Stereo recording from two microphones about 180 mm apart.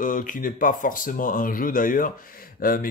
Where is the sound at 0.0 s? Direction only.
50° left (ahead or behind).